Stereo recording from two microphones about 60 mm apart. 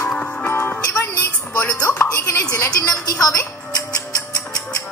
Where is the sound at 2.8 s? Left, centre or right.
Left.